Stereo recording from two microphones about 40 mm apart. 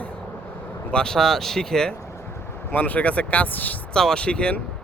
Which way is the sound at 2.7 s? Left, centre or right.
Left.